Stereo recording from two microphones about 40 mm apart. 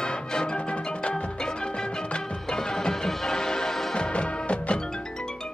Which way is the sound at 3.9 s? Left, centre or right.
Left.